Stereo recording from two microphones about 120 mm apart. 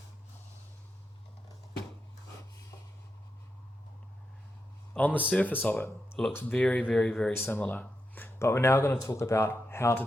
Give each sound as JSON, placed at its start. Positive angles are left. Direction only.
{"t": 4.9, "sound": "speech", "side_deg": 10}